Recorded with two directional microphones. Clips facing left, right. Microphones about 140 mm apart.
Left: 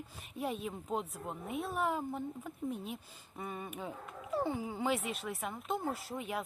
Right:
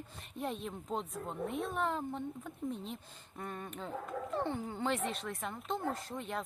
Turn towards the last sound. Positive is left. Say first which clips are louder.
# left 1 dB
turn(degrees=5)  # may be behind; listen again after turning